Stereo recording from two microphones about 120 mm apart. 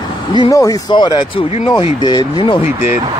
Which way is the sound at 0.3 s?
40° left (ahead or behind).